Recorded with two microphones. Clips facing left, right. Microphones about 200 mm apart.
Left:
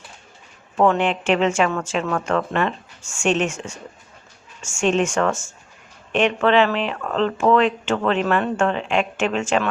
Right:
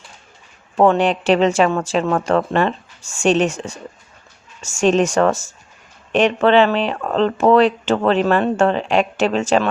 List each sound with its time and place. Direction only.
0.8 s speech: 35° right (ahead or behind)